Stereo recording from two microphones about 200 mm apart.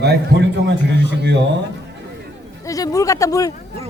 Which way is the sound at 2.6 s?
15° left (ahead or behind).